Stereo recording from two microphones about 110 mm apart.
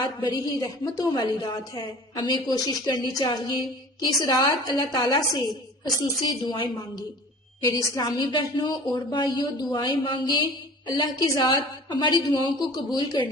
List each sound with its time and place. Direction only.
0.0 s a woman's voice: 40° left (ahead or behind)